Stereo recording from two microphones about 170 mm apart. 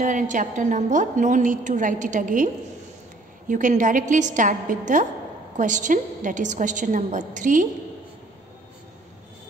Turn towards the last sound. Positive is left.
turn(degrees=-50)  # may be behind; listen again after turning